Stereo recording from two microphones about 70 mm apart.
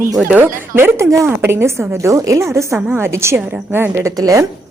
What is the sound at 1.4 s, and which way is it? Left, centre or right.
A woman's voice, right.